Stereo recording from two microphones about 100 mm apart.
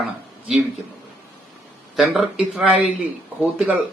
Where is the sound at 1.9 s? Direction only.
5° right (ahead or behind).